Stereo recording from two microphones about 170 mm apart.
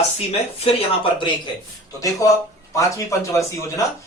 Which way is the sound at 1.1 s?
30° left (ahead or behind).